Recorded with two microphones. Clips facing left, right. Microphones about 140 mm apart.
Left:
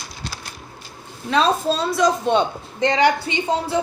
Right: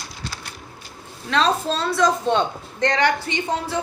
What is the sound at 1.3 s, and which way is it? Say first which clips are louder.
A woman's voice: left 2 dB; 10° left (ahead or behind).